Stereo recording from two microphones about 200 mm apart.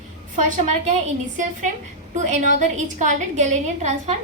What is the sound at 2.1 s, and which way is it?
A woman's voice, 35° right (ahead or behind).